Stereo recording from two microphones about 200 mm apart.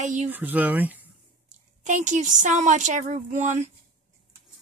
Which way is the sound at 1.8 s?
40° right (ahead or behind).